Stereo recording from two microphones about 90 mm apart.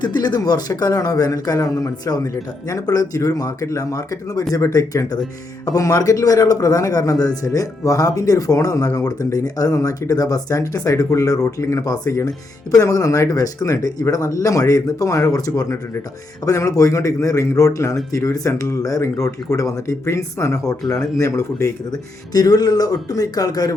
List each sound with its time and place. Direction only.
0.0 s a man's voice: 55° left (ahead or behind); by 21.7 s 30° left (ahead or behind)
21.8 s speech: 45° left (ahead or behind)